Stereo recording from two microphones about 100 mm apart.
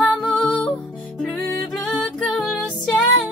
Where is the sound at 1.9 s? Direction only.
15° left (ahead or behind).